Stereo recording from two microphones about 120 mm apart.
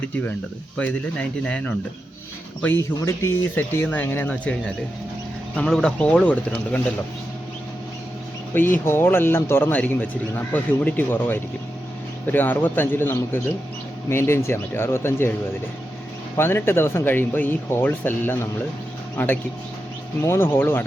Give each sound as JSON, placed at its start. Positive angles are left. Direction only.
{"t": 0.8, "sound": "a man's voice", "side_deg": 10}
{"t": 5.5, "sound": "a man's voice", "side_deg": 5}
{"t": 8.5, "sound": "a man's voice", "side_deg": 20}
{"t": 16.4, "sound": "speech", "side_deg": 20}